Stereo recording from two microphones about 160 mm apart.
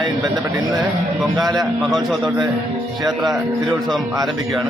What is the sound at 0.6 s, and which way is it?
Speech, 25° right (ahead or behind).